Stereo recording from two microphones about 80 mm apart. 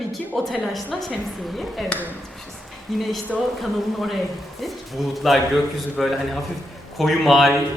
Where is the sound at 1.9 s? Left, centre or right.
Centre.